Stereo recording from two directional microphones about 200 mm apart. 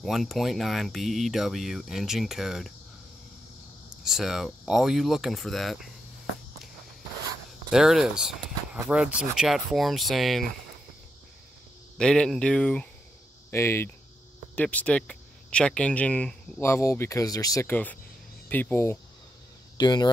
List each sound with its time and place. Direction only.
0.0 s speech: centre (ahead or behind)
4.0 s speech: centre (ahead or behind)
7.7 s speech: centre (ahead or behind)
12.0 s speech: 5° left (ahead or behind)
19.8 s speech: 20° left (ahead or behind)